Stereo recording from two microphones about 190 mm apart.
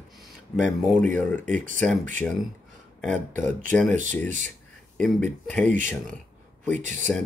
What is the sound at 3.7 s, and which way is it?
Speech, 10° left (ahead or behind).